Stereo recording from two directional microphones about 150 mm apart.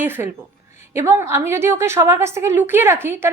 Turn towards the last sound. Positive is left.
turn(degrees=-15)  # may be behind; listen again after turning